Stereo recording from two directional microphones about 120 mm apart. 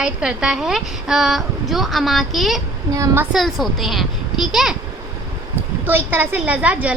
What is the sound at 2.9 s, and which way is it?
Speech, 25° right (ahead or behind).